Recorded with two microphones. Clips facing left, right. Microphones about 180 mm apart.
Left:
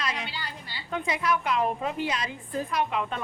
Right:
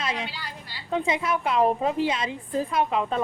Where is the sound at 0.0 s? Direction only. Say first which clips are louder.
Right 3 dB; 25° right (ahead or behind).